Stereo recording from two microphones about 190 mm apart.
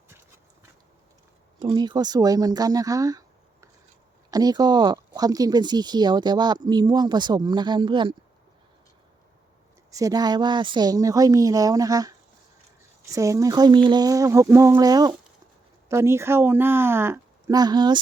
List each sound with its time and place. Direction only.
1.5 s speech: 25° right (ahead or behind)
9.9 s speech: 20° right (ahead or behind)